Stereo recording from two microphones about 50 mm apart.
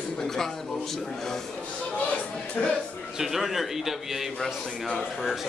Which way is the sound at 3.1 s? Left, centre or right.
Centre.